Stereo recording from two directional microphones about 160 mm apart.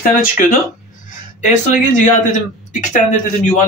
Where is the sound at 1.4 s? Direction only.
50° left (ahead or behind).